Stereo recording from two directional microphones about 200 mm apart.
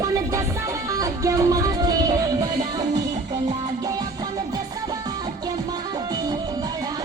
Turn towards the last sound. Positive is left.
turn(degrees=-20)  # may be behind; listen again after turning